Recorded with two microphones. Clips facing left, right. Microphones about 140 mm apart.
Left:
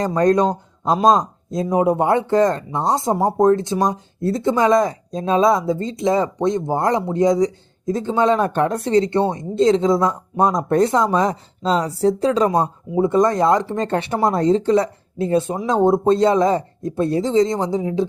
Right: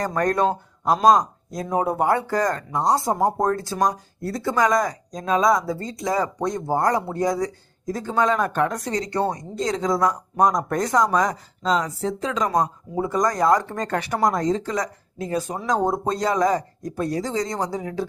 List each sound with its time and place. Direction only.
0.2 s speech: 20° left (ahead or behind)